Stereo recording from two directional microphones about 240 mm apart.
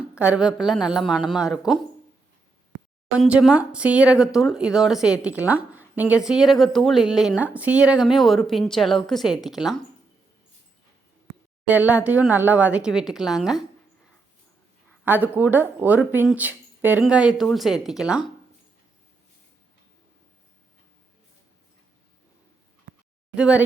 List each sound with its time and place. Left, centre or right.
0.0 s speech: centre
2.7 s a sound: right
3.2 s speech: centre
11.7 s speech: centre
15.0 s speech: centre
23.3 s speech: centre